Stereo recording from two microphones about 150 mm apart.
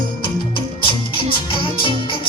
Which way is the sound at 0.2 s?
35° left (ahead or behind).